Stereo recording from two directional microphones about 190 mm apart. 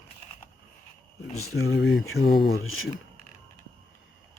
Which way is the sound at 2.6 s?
90° left.